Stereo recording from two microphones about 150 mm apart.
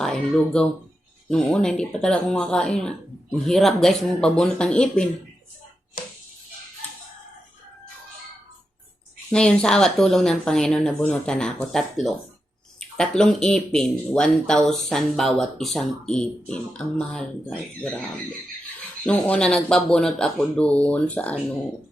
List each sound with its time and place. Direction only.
0.0 s speech: 5° left (ahead or behind)
9.3 s speech: 5° left (ahead or behind)
19.0 s speech: 10° left (ahead or behind)